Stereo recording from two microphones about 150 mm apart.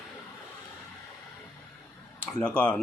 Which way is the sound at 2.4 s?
5° left (ahead or behind).